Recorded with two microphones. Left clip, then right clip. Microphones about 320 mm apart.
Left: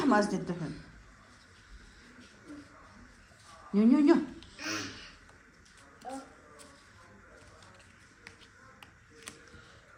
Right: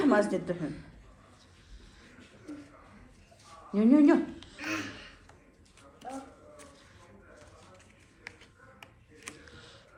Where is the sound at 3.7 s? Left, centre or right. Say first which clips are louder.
Right 2 dB; centre.